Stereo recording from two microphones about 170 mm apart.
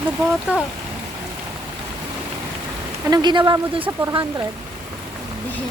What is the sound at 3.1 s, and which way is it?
Speech, 25° right (ahead or behind).